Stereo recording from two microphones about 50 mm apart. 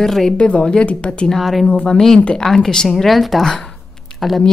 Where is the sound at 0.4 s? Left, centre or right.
Left.